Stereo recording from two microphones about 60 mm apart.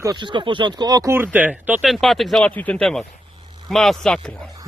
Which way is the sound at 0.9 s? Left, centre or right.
Right.